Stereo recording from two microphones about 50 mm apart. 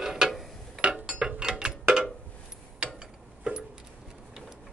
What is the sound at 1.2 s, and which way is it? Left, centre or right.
Mechanisms, centre.